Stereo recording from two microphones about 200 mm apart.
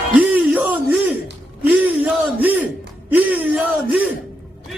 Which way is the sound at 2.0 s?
10° right (ahead or behind).